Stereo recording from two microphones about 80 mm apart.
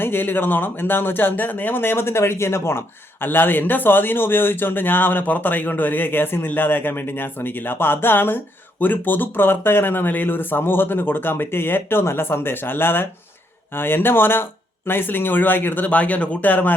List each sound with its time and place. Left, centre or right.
0.0 s speech: left